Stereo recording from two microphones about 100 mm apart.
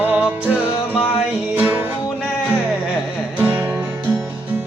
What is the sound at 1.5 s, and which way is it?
Music, 15° right (ahead or behind).